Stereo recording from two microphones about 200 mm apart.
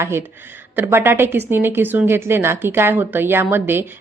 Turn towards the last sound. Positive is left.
turn(degrees=-10)  # may be behind; listen again after turning